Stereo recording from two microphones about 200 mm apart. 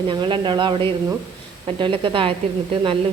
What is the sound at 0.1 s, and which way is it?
A woman's voice, 25° right (ahead or behind).